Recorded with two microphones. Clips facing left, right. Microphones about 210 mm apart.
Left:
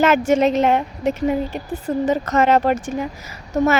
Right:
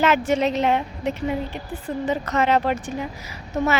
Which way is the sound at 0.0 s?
45° left (ahead or behind).